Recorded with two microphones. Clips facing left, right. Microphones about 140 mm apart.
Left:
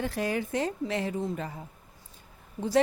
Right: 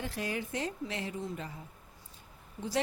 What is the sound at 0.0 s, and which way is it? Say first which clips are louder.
Speech: left 6 dB; 65° left (ahead or behind).